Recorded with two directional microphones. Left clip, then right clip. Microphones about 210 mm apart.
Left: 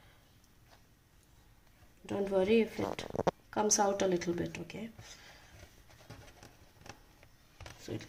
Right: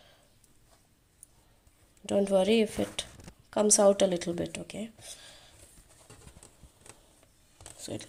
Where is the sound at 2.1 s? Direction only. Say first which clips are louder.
Right 5 dB; 40° right (ahead or behind).